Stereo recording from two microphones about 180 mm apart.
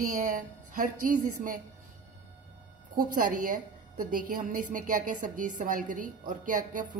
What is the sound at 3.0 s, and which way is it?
A woman's voice, 45° right (ahead or behind).